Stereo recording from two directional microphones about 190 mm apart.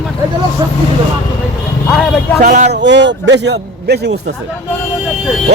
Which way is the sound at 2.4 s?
40° right (ahead or behind).